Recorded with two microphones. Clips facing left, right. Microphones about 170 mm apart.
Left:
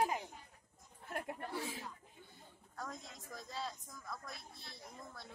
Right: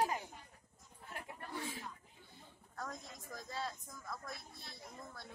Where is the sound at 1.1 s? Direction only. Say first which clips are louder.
Left 7 dB; 55° left (ahead or behind).